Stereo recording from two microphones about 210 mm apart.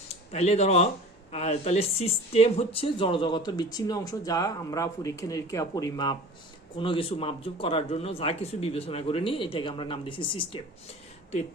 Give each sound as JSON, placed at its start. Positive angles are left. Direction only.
{"t": 0.3, "sound": "speech", "side_deg": 30}